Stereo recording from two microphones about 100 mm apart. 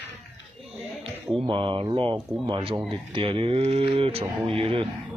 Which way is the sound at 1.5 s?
60° right (ahead or behind).